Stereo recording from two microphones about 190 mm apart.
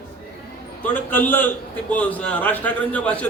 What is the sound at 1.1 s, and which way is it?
A man's voice, 10° left (ahead or behind).